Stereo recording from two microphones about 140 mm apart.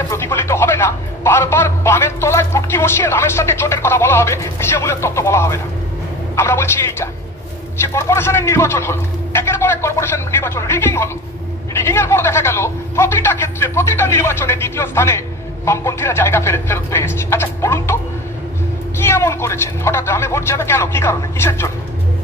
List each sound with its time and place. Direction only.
0.1 s speech: 20° left (ahead or behind)
18.9 s speech: 20° left (ahead or behind)